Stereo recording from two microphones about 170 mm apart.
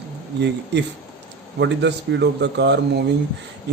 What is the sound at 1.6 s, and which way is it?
Speech, 90° right.